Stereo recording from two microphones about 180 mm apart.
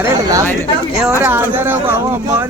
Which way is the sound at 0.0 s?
20° right (ahead or behind).